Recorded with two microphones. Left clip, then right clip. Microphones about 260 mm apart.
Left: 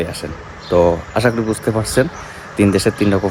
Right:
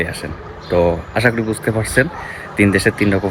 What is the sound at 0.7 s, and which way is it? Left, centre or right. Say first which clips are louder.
Speech: left 2 dB; centre.